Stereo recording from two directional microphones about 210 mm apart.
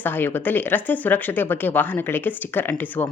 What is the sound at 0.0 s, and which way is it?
Speech, 10° left (ahead or behind).